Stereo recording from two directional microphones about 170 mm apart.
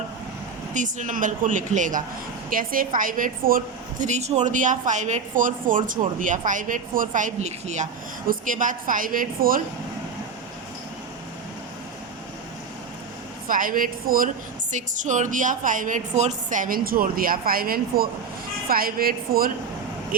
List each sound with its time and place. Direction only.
0.7 s a woman's voice: 50° right (ahead or behind)
13.5 s a woman's voice: 55° right (ahead or behind)